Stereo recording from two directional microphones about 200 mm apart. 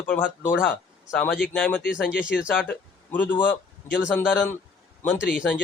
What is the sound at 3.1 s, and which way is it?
Speech, 10° left (ahead or behind).